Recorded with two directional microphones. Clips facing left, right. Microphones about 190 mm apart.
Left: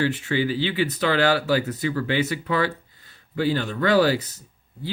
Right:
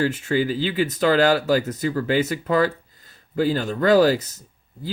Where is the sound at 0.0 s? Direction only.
40° right (ahead or behind).